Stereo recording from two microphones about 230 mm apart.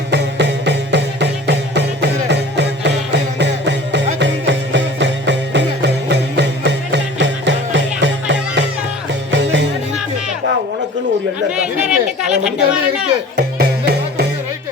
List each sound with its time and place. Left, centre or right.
0.1 s music: right
11.5 s chatter: centre
13.3 s music: right